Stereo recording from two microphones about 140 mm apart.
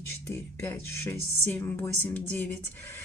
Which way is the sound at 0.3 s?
15° left (ahead or behind).